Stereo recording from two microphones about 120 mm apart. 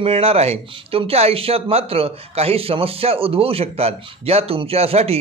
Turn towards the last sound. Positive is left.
turn(degrees=-60)  # may be behind; listen again after turning